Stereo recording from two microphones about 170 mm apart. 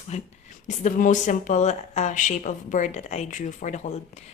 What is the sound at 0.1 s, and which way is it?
Speech, 40° left (ahead or behind).